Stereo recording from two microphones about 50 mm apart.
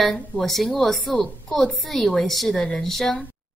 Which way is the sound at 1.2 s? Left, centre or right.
Centre.